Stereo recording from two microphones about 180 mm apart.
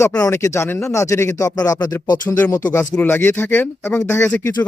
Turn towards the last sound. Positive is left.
turn(degrees=10)  # may be behind; listen again after turning